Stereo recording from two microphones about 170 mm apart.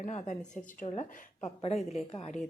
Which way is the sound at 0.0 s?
45° left (ahead or behind).